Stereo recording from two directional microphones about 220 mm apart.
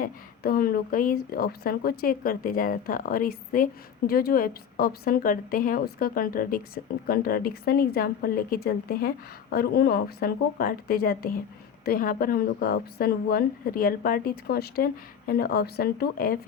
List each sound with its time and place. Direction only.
0.0 s speech: 45° left (ahead or behind)